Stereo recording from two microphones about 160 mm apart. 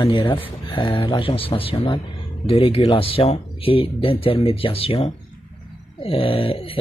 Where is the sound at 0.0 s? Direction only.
30° left (ahead or behind).